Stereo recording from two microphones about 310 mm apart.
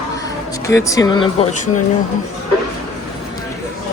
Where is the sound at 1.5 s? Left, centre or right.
Left.